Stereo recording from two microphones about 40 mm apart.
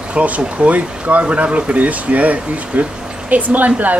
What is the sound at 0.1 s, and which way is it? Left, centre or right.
A woman's voice, right.